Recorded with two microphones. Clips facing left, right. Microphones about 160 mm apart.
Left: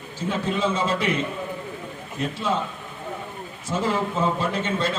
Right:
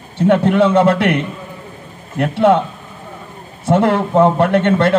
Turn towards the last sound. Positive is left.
turn(degrees=-65)  # may be behind; listen again after turning